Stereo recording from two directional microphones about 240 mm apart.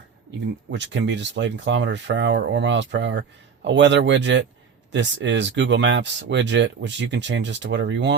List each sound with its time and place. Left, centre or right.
0.3 s speech: right